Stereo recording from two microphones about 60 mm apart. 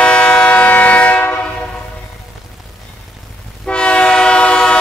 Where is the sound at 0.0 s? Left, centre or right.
Centre.